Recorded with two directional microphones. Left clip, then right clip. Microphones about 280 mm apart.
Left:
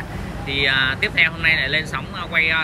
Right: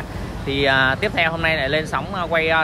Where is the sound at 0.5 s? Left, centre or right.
Centre.